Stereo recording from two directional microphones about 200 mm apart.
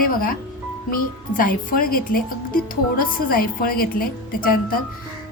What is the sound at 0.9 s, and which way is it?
A woman's voice, 45° left (ahead or behind).